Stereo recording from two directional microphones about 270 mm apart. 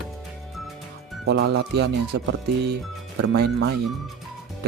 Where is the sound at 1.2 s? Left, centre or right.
Right.